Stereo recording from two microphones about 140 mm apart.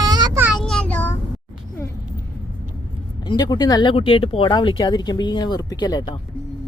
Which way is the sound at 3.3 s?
30° left (ahead or behind).